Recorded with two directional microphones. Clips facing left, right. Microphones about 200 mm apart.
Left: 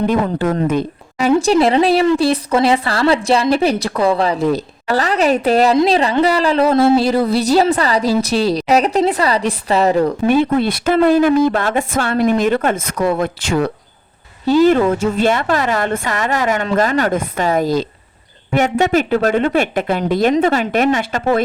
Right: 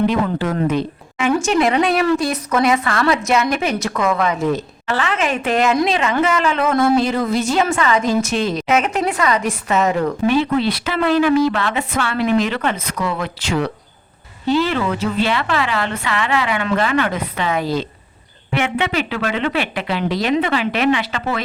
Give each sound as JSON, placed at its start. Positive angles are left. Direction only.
{"t": 0.1, "sound": "a woman's voice", "side_deg": 45}
{"t": 0.7, "sound": "a sound", "side_deg": 50}
{"t": 1.3, "sound": "a woman's voice", "side_deg": 35}
{"t": 10.2, "sound": "a woman's voice", "side_deg": 50}